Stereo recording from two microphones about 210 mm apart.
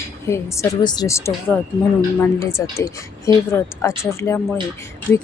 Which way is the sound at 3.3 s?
15° left (ahead or behind).